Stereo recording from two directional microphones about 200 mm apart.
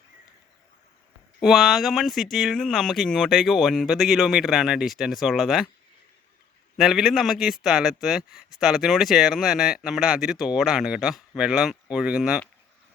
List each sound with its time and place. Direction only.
1.4 s a man's voice: centre (ahead or behind)
6.7 s a man's voice: centre (ahead or behind)